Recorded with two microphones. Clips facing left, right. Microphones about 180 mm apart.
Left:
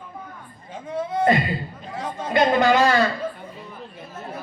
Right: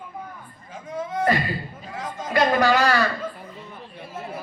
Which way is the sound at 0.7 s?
30° left (ahead or behind).